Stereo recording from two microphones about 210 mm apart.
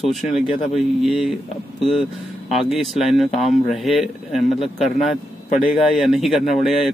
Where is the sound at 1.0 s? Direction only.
Centre (ahead or behind).